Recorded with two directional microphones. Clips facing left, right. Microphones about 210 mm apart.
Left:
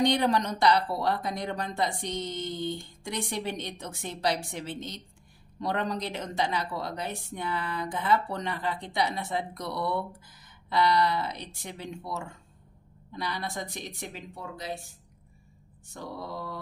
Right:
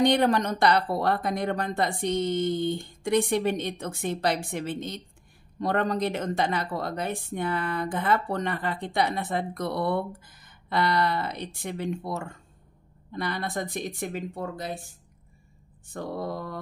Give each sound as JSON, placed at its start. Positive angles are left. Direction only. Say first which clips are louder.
{"t": 0.0, "sound": "a woman's voice", "louder": "right 3 dB", "side_deg": -55}